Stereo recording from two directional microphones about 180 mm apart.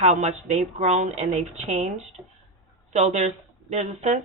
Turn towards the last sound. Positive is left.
turn(degrees=-40)  # may be behind; listen again after turning